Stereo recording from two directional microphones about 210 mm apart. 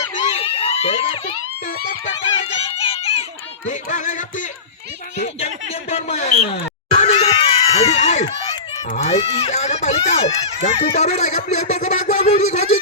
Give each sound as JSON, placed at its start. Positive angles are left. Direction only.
{"t": 0.3, "sound": "a sound", "side_deg": 30}
{"t": 2.7, "sound": "children playing", "side_deg": 25}
{"t": 3.7, "sound": "speech", "side_deg": 35}
{"t": 5.9, "sound": "speech", "side_deg": 30}
{"t": 6.9, "sound": "screaming", "side_deg": 30}
{"t": 8.9, "sound": "speech", "side_deg": 30}